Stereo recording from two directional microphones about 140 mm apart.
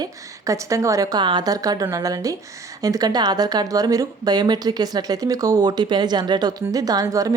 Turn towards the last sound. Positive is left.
turn(degrees=-25)  # may be behind; listen again after turning